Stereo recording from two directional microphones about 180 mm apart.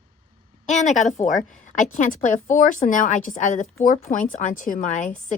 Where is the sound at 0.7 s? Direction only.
40° left (ahead or behind).